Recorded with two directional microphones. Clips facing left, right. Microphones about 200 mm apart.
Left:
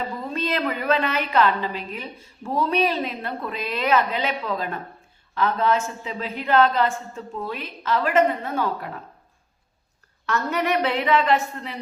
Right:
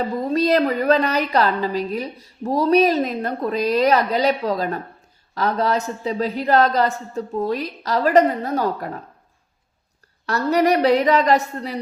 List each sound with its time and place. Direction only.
0.0 s a woman's voice: 40° right (ahead or behind)
10.2 s a woman's voice: 35° right (ahead or behind)